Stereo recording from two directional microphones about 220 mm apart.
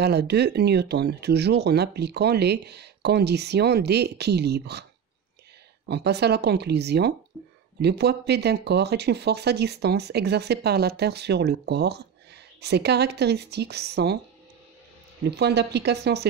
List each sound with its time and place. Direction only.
0.0 s speech: 50° right (ahead or behind)
5.9 s speech: 50° right (ahead or behind)
15.2 s speech: 50° right (ahead or behind)